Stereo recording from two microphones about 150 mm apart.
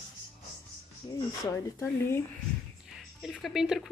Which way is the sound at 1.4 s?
15° left (ahead or behind).